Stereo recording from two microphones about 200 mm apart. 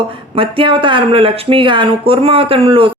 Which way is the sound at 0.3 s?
25° right (ahead or behind).